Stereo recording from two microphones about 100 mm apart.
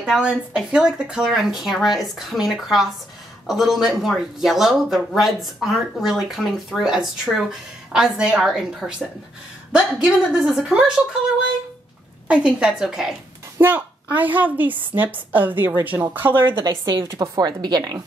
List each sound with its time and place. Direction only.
0.0 s a woman's voice: 5° right (ahead or behind)
12.3 s a woman's voice: 10° right (ahead or behind)
13.6 s a woman's voice: 20° right (ahead or behind)
16.6 s a woman's voice: 40° right (ahead or behind)